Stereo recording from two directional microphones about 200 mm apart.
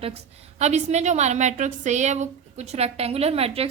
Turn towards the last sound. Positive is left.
turn(degrees=-30)  # may be behind; listen again after turning